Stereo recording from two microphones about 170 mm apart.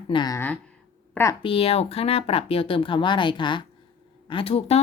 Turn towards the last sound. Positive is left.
turn(degrees=35)  # may be behind; listen again after turning